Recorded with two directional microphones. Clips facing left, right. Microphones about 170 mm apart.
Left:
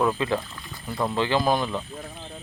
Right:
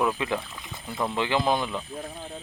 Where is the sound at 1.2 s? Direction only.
20° right (ahead or behind).